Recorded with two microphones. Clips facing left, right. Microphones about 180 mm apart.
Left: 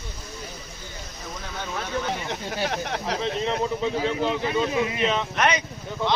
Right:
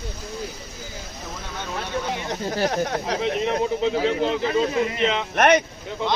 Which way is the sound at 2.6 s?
40° right (ahead or behind).